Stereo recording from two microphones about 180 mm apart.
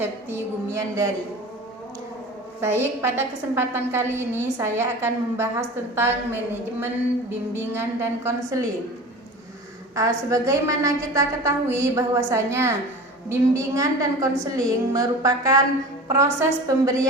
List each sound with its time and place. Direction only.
0.0 s a woman's voice: 15° right (ahead or behind)
2.6 s a woman's voice: 15° right (ahead or behind)
9.9 s a woman's voice: 20° right (ahead or behind)